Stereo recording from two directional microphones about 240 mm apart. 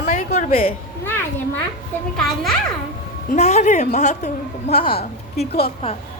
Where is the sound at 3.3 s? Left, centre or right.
Left.